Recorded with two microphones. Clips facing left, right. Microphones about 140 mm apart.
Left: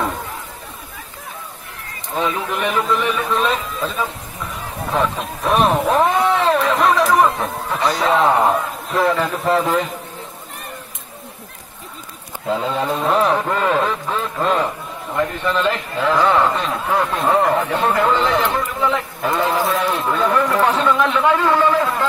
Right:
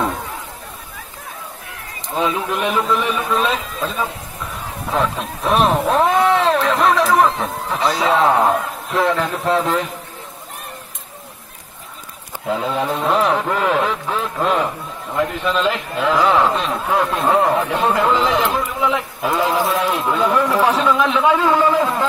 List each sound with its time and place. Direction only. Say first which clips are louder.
2.1 s speech: right 1 dB; 5° right (ahead or behind)
4.9 s speech: even; centre (ahead or behind)
12.4 s a man's voice: even; centre (ahead or behind)